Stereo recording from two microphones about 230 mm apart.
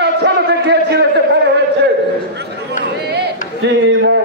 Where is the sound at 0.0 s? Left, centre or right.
Right.